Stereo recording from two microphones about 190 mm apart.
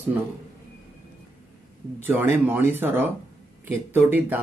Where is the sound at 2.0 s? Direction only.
10° right (ahead or behind).